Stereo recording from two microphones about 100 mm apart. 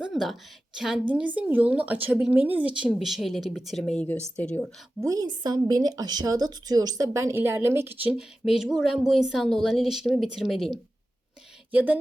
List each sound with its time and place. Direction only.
0.0 s a sound: centre (ahead or behind)
0.8 s a woman's voice: 5° right (ahead or behind)
2.9 s speech: centre (ahead or behind)
5.0 s a woman's voice: 40° right (ahead or behind); by 8.1 s 20° right (ahead or behind)
8.1 s speech: 5° right (ahead or behind)
11.7 s a woman's voice: 15° right (ahead or behind)